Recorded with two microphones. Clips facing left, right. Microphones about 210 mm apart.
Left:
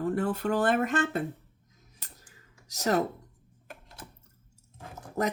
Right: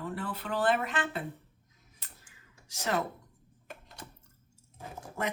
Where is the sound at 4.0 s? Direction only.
5° left (ahead or behind).